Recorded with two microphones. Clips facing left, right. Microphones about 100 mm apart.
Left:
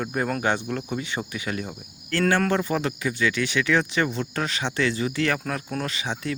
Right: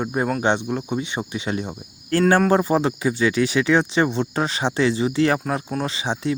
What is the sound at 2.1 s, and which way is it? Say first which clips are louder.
Speech: right 5 dB; 35° right (ahead or behind).